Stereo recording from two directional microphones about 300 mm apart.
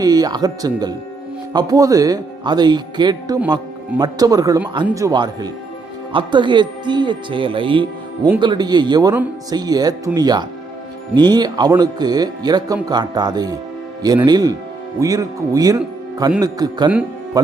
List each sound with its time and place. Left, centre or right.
0.0 s speech: centre